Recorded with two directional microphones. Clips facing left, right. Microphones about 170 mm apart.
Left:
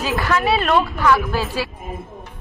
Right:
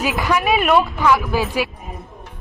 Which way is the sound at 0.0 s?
15° right (ahead or behind).